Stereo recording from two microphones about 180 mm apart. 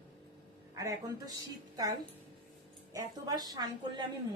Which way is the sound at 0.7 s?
20° right (ahead or behind).